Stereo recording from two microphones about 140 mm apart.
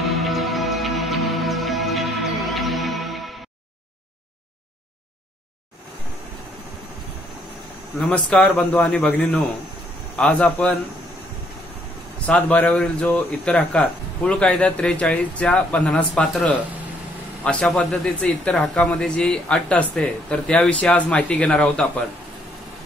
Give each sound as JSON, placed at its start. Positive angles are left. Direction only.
{"t": 0.1, "sound": "music", "side_deg": 0}
{"t": 8.3, "sound": "speech", "side_deg": 10}
{"t": 12.3, "sound": "speech", "side_deg": 10}